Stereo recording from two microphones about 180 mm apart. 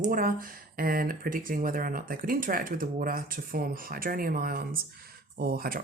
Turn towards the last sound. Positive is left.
turn(degrees=-55)  # may be behind; listen again after turning